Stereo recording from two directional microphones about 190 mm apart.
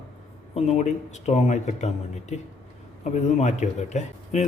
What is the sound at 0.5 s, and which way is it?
A man's voice, 35° left (ahead or behind).